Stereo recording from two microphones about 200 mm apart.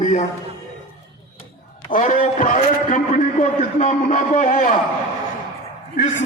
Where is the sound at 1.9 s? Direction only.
40° left (ahead or behind).